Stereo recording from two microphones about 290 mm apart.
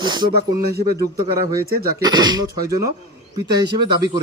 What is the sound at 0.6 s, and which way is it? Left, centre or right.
Speech, right.